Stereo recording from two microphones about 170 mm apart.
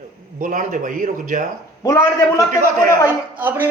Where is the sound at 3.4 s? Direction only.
10° right (ahead or behind).